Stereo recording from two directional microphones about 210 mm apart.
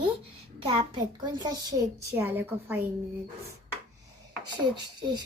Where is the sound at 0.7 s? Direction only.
20° right (ahead or behind).